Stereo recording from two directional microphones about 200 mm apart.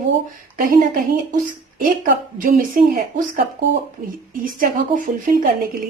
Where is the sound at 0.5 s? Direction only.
45° right (ahead or behind).